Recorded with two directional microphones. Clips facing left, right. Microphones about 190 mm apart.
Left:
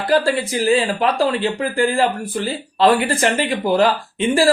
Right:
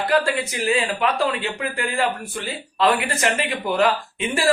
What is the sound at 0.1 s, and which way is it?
Speech, 35° left (ahead or behind).